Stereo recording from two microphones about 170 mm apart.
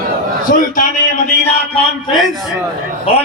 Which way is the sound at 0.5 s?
50° left (ahead or behind).